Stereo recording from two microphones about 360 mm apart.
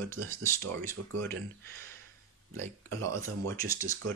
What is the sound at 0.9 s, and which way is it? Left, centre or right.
Speech, right.